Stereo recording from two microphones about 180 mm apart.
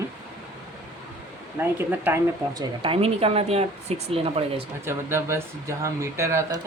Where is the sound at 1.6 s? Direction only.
10° right (ahead or behind).